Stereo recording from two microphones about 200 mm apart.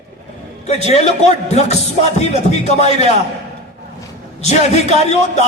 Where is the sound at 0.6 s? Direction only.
35° left (ahead or behind).